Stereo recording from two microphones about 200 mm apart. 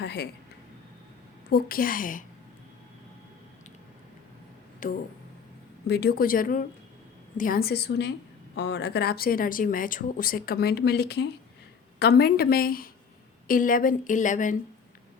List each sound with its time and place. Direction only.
0.0 s speech: 55° left (ahead or behind)
1.5 s speech: 50° left (ahead or behind)
4.8 s a woman's voice: 45° left (ahead or behind)